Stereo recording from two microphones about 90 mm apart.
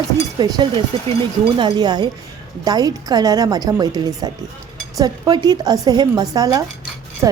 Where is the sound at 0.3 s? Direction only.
50° right (ahead or behind).